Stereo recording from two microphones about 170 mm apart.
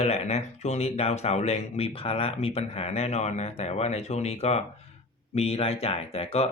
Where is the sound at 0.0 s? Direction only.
40° left (ahead or behind).